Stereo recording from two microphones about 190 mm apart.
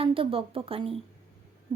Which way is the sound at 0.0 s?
30° right (ahead or behind).